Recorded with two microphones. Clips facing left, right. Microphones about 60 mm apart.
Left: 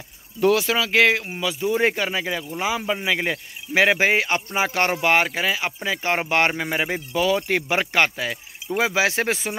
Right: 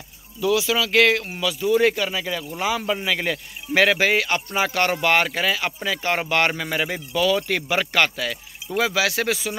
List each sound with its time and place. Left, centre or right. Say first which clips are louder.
0.4 s speech: left 2 dB; left
0.7 s speech: even; left